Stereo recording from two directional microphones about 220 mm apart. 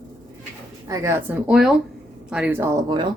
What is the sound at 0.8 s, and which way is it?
Speech, 15° right (ahead or behind).